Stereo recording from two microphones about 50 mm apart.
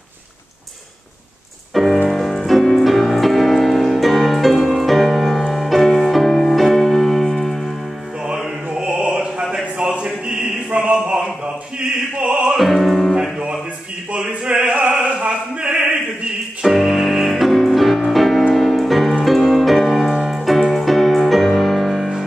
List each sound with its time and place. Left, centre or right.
1.7 s music: centre
8.6 s music: centre
12.4 s music: centre
14.1 s music: right
16.7 s music: centre